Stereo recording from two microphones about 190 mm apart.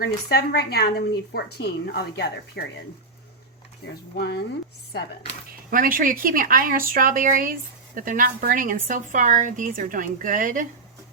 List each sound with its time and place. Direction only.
0.0 s a woman's voice: 55° left (ahead or behind)
4.1 s a woman's voice: 60° left (ahead or behind)
5.7 s a woman's voice: 45° right (ahead or behind)